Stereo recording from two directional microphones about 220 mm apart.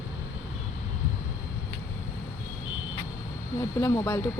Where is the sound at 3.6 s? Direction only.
15° left (ahead or behind).